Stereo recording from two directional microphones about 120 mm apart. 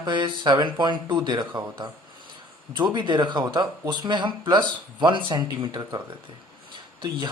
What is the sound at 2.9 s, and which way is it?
Speech, 40° right (ahead or behind).